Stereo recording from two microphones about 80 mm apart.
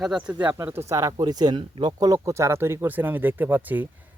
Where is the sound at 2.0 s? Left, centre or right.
Right.